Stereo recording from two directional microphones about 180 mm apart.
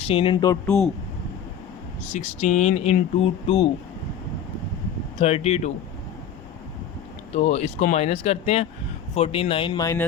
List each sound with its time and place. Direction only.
0.1 s speech: 30° left (ahead or behind)
2.1 s speech: 40° left (ahead or behind)
5.2 s speech: 35° left (ahead or behind)
7.3 s speech: 40° left (ahead or behind); by 10.1 s 15° left (ahead or behind)